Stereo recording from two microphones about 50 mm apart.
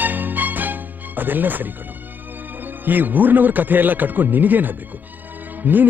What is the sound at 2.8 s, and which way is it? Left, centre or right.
Speech, right.